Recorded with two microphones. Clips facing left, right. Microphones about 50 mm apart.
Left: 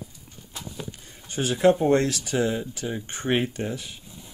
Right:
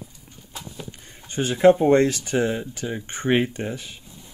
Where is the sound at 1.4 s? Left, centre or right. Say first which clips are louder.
Right 4 dB; right.